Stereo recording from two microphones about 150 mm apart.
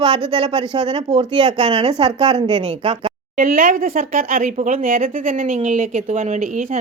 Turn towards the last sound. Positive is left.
turn(degrees=-50)  # may be behind; listen again after turning